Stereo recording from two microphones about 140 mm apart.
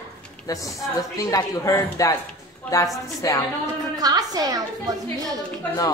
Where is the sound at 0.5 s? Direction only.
25° left (ahead or behind).